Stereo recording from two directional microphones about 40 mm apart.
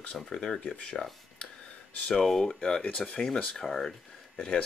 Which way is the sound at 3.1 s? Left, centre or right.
Left.